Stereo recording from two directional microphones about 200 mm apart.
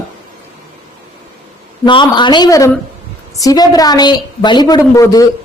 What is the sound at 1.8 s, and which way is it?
A woman's voice, 25° left (ahead or behind).